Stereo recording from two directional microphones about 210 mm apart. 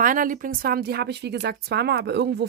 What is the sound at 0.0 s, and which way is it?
Speech, 40° right (ahead or behind).